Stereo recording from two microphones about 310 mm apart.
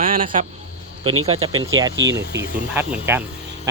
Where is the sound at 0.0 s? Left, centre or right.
Right.